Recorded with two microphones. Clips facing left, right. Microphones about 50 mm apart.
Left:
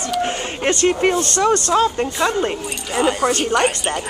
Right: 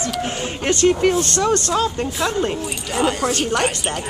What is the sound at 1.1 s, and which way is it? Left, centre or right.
Speech, centre.